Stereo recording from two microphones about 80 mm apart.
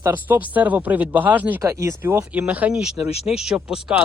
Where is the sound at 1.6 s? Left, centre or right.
Right.